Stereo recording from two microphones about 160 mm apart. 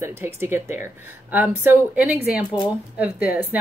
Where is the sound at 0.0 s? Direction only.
15° right (ahead or behind).